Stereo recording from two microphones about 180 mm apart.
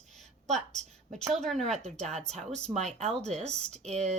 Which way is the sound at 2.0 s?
35° right (ahead or behind).